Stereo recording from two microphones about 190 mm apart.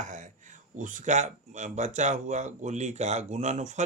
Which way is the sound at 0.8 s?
40° right (ahead or behind).